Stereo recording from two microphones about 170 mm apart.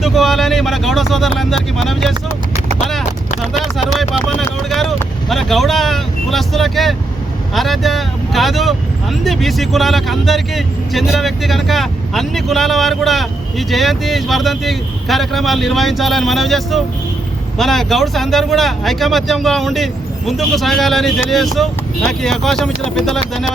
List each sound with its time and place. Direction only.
0.0 s speech: centre (ahead or behind)
4.4 s speech: centre (ahead or behind)